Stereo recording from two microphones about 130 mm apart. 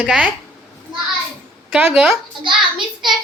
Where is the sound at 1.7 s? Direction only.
10° right (ahead or behind).